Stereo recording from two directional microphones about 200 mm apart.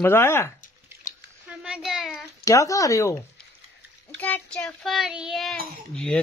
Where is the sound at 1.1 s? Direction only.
40° left (ahead or behind).